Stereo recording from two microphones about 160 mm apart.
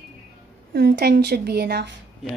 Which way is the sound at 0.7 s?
85° right.